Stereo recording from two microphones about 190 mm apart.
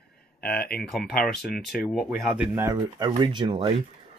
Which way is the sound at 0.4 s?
55° left (ahead or behind).